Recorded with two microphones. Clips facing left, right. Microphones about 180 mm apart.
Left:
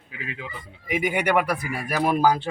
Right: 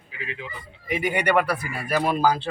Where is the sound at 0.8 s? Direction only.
10° left (ahead or behind).